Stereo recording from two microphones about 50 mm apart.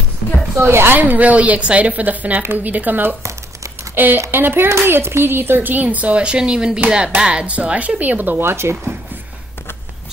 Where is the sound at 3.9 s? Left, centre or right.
Right.